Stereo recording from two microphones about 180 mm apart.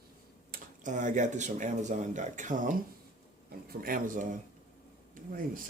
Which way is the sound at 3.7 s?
50° right (ahead or behind).